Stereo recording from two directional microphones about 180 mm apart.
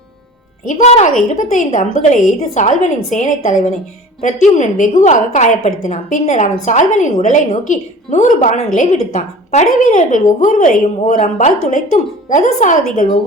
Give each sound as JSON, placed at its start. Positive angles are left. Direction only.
{"t": 0.7, "sound": "a woman's voice", "side_deg": 40}